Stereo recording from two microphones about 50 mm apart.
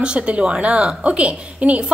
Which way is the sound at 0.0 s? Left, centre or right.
Right.